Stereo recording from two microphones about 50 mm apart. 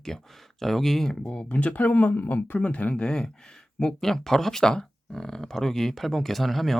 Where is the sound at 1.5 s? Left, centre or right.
Left.